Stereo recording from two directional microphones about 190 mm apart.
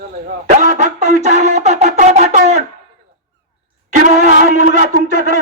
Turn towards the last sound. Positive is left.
turn(degrees=-45)  # may be behind; listen again after turning